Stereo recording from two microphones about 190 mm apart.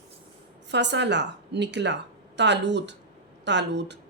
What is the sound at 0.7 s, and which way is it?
A woman's voice, 65° right (ahead or behind).